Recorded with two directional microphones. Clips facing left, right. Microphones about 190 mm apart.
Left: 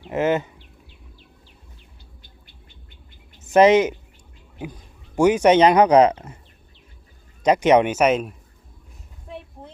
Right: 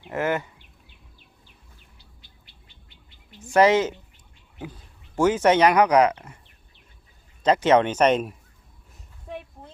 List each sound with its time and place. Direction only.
0.1 s speech: 20° left (ahead or behind)
3.5 s speech: 20° left (ahead or behind)
7.4 s speech: 15° left (ahead or behind)